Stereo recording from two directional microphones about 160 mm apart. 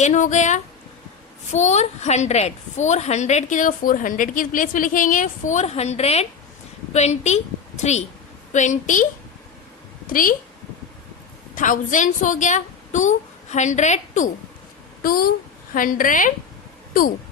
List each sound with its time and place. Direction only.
0.0 s a woman's voice: 50° left (ahead or behind)
10.1 s a woman's voice: 60° left (ahead or behind)
11.5 s a woman's voice: 55° left (ahead or behind)
15.0 s a woman's voice: 65° left (ahead or behind)